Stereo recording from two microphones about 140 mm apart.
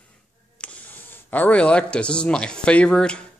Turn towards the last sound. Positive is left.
turn(degrees=5)  # may be behind; listen again after turning